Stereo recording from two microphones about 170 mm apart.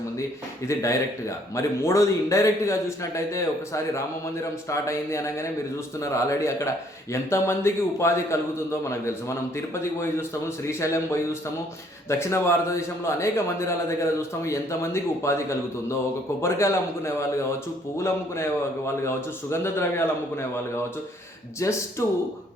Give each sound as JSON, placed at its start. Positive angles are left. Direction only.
{"t": 0.7, "sound": "speech", "side_deg": 15}